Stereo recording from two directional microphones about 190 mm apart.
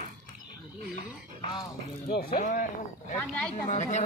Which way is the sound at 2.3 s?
40° left (ahead or behind).